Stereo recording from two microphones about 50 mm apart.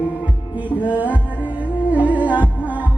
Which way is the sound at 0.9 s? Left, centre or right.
Right.